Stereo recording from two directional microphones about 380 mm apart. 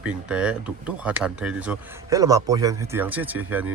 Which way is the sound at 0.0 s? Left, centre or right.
Centre.